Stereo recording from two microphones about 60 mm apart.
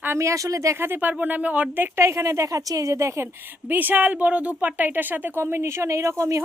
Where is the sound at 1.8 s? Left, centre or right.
Right.